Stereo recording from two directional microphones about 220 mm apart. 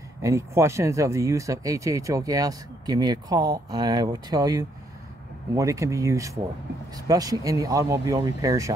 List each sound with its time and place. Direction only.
0.2 s speech: 15° right (ahead or behind)